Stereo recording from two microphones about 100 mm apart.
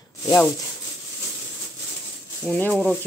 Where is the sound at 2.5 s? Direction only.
10° left (ahead or behind).